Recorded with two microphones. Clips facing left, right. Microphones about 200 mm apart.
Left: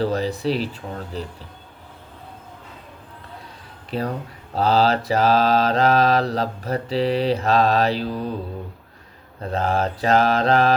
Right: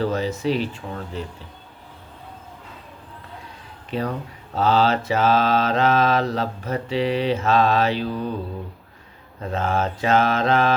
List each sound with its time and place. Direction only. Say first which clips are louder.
0.0 s mantra: left 1 dB; 35° left (ahead or behind)
3.9 s mantra: even; 35° left (ahead or behind)
9.4 s mantra: left 1 dB; 35° left (ahead or behind)